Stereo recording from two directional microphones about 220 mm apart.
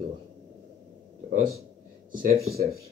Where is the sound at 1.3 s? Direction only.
35° right (ahead or behind).